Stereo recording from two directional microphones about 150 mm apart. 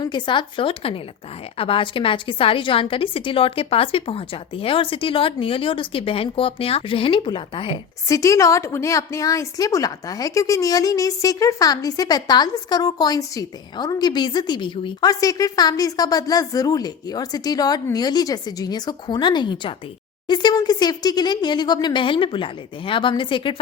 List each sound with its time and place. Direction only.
0.0 s a woman's voice: 30° left (ahead or behind)
8.0 s a woman's voice: 20° left (ahead or behind)